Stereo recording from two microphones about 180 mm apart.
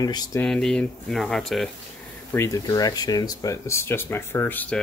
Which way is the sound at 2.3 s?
15° left (ahead or behind).